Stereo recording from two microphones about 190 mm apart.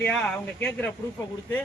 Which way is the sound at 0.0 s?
5° left (ahead or behind).